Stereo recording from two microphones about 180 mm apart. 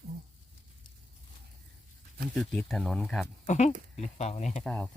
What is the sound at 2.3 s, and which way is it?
Speech, 5° left (ahead or behind).